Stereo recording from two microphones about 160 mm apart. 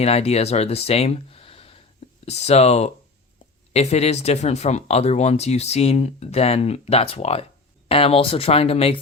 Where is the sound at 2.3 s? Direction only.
40° left (ahead or behind).